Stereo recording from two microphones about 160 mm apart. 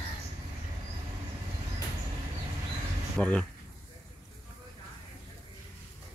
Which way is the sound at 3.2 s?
10° left (ahead or behind).